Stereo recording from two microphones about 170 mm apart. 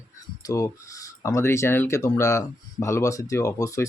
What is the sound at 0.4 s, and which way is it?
Speech, 20° left (ahead or behind).